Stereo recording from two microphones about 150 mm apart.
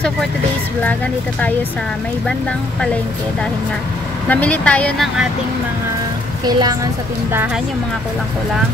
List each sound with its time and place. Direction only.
4.3 s speech: 10° left (ahead or behind)
6.4 s a woman's voice: 25° right (ahead or behind)